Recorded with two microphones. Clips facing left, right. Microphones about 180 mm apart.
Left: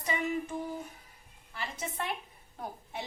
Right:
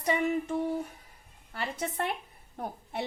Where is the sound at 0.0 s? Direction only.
65° right (ahead or behind).